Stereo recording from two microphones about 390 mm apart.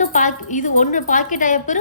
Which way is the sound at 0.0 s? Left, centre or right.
Centre.